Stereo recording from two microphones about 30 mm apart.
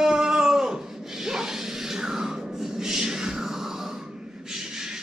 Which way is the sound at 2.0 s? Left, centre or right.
Centre.